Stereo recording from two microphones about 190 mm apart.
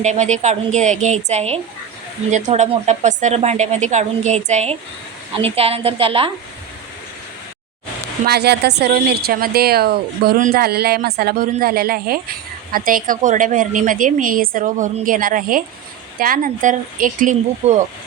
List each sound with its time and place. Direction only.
0.0 s a woman's voice: 40° right (ahead or behind)
8.3 s a woman's voice: 60° right (ahead or behind); by 17.8 s 40° right (ahead or behind)